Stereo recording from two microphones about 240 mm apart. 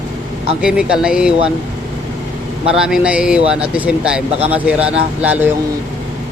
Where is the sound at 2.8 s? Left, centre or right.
Centre.